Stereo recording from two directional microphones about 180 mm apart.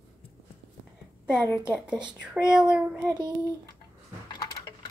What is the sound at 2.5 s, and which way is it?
Child singing, 5° right (ahead or behind).